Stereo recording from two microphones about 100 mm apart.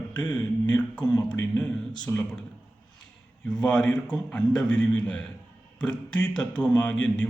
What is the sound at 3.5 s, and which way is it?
Speech, 5° left (ahead or behind).